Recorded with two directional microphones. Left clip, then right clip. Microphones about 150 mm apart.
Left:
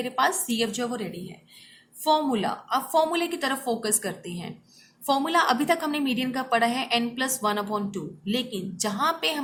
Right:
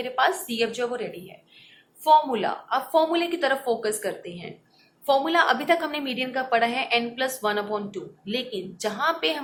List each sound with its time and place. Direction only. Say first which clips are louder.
0.0 s a woman's voice: right 1 dB; 30° left (ahead or behind)
2.0 s a woman's voice: right 4 dB; 30° left (ahead or behind)